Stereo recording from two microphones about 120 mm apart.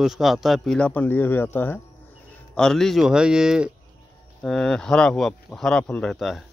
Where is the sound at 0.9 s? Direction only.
15° left (ahead or behind).